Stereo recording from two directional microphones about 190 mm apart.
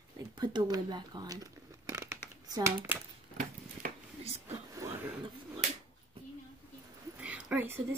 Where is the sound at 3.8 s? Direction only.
45° right (ahead or behind).